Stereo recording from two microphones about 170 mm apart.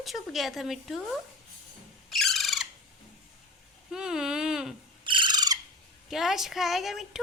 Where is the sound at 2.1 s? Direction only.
Centre (ahead or behind).